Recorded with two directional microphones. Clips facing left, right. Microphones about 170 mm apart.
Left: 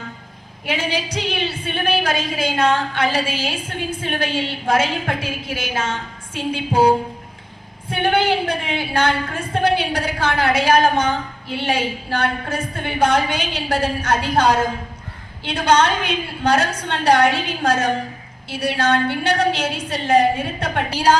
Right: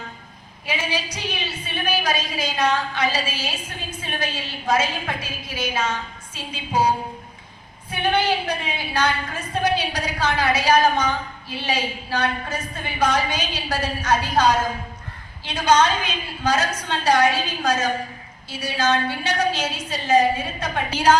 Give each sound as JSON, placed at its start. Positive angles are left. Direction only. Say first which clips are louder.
{"t": 1.1, "sound": "a woman's voice", "louder": "left 6 dB", "side_deg": 60}
{"t": 20.9, "sound": "a woman's voice", "louder": "even", "side_deg": 35}